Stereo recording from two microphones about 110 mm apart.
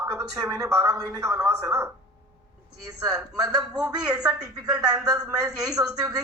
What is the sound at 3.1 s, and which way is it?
Speech, 5° right (ahead or behind).